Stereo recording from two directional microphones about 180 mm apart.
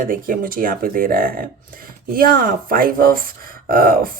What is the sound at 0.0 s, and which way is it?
Speech, 50° right (ahead or behind).